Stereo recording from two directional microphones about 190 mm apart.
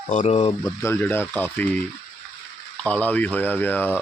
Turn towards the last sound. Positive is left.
turn(degrees=10)  # may be behind; listen again after turning